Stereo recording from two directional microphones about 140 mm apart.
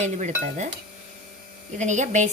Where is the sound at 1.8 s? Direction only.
60° right (ahead or behind).